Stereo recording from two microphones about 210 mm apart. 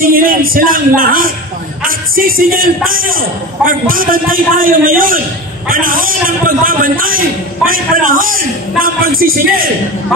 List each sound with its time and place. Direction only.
0.0 s a man's voice: 40° right (ahead or behind)